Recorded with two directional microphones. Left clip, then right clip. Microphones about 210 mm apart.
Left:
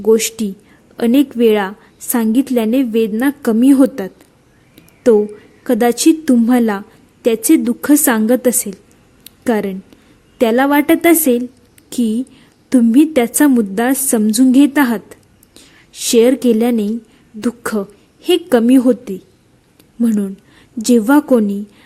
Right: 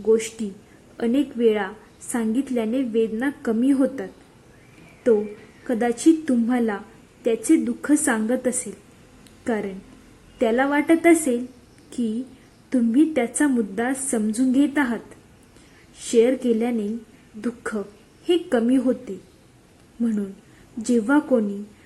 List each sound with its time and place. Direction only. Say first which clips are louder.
0.0 s a woman's voice: left 7 dB; 45° left (ahead or behind)
5.6 s a woman's voice: left 7 dB; 45° left (ahead or behind)
16.1 s a woman's voice: left 7 dB; 45° left (ahead or behind)